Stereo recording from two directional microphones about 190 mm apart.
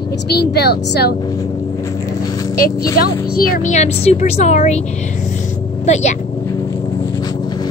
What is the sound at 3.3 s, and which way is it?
Speech, 50° left (ahead or behind).